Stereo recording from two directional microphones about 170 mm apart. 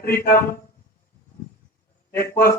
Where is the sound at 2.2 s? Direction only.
15° left (ahead or behind).